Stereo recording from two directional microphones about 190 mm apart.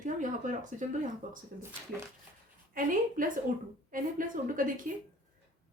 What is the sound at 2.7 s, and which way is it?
Speech, 45° right (ahead or behind).